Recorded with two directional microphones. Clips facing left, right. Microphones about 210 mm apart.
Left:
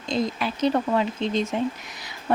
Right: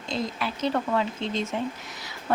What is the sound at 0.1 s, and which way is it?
A woman's voice, 15° left (ahead or behind).